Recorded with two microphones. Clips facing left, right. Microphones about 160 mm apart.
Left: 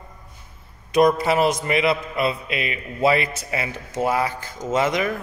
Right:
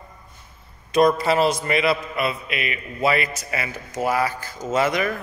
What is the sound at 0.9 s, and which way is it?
A man's voice, 15° left (ahead or behind).